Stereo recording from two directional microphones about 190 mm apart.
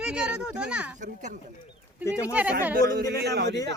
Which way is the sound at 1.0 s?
40° right (ahead or behind).